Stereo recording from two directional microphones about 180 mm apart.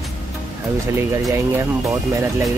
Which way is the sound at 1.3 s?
15° right (ahead or behind).